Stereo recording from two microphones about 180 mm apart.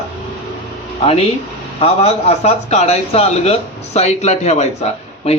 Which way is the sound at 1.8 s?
35° left (ahead or behind).